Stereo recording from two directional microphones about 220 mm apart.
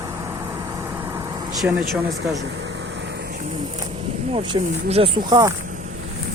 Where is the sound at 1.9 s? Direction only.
Centre (ahead or behind).